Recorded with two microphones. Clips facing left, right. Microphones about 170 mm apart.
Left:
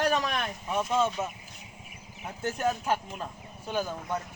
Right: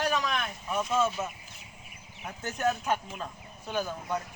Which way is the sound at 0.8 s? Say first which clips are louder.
Left 1 dB; 15° left (ahead or behind).